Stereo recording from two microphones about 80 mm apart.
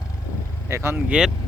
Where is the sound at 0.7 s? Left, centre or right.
Right.